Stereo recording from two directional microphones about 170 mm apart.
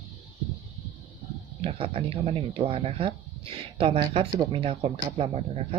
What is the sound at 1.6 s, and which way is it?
Speech, 30° right (ahead or behind).